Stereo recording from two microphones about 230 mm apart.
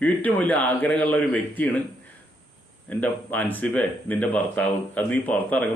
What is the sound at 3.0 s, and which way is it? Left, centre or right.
Speech, centre.